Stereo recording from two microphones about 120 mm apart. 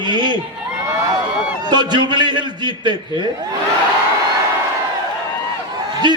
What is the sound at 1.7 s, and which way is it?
A man's voice, 40° right (ahead or behind).